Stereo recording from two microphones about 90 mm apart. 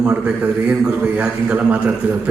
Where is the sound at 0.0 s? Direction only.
20° right (ahead or behind).